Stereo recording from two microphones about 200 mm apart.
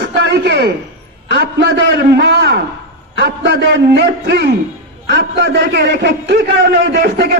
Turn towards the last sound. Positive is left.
turn(degrees=-55)  # may be behind; listen again after turning